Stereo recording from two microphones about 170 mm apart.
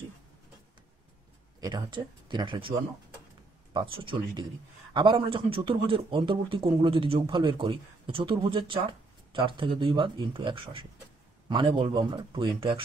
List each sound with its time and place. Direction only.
1.6 s speech: 25° right (ahead or behind)
3.7 s speech: 30° right (ahead or behind)